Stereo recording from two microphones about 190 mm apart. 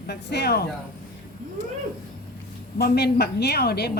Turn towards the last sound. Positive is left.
turn(degrees=55)  # may be behind; listen again after turning